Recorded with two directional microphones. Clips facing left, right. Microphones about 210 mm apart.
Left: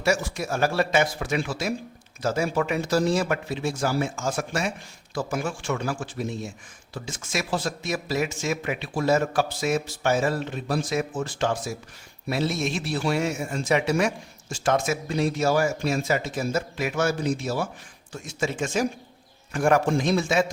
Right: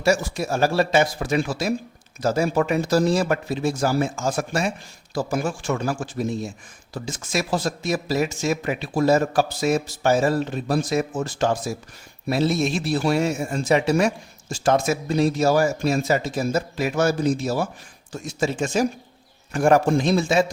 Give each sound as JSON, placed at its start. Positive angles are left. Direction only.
{"t": 0.0, "sound": "speech", "side_deg": -35}